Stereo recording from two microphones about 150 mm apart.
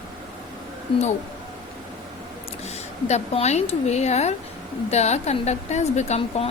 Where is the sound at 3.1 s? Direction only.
45° left (ahead or behind).